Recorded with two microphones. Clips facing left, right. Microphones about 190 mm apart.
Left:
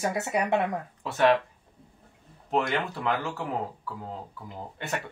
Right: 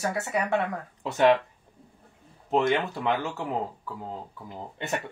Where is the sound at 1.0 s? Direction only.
20° right (ahead or behind).